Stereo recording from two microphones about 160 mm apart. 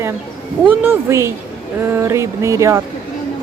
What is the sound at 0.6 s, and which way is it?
A woman's voice, 15° right (ahead or behind).